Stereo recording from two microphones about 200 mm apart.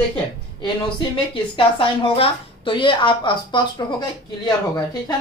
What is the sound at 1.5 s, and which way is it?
A woman's voice, 25° left (ahead or behind).